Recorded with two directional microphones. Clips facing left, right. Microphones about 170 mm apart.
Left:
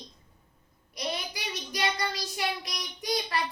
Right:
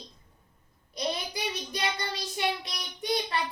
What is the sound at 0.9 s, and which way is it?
Child singing, 25° right (ahead or behind).